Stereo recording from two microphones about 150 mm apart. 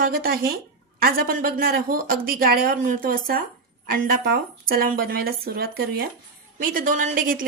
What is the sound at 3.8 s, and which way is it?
Speech, 85° right.